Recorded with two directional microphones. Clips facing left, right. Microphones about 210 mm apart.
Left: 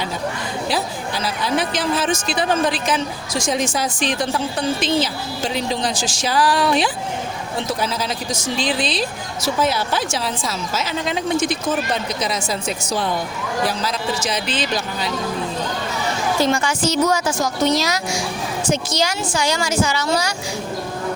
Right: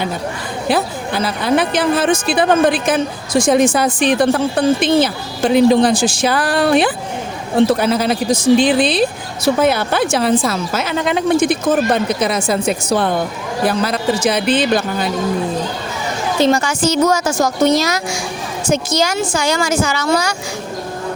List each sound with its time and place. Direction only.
0.7 s a woman's voice: 55° right (ahead or behind)
16.5 s a woman's voice: 40° right (ahead or behind)